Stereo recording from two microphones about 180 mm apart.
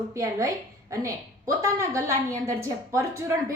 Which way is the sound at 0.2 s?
15° right (ahead or behind).